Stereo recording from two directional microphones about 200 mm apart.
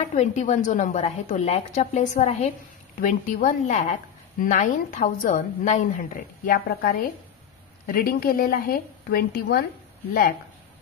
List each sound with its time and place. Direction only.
0.0 s a woman's voice: 35° left (ahead or behind)